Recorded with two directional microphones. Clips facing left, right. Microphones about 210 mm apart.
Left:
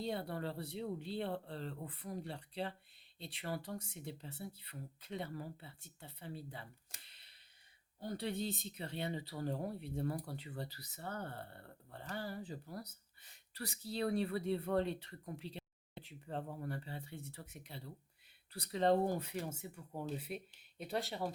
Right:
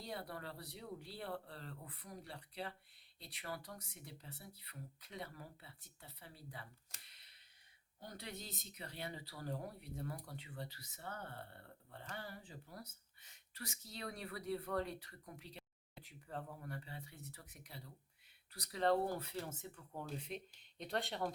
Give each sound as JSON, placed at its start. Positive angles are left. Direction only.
{"t": 0.0, "sound": "speech", "side_deg": 25}
{"t": 7.1, "sound": "a sound", "side_deg": 30}
{"t": 8.0, "sound": "speech", "side_deg": 30}